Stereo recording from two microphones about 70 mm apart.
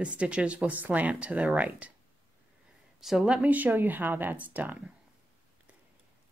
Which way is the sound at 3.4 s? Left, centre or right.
Right.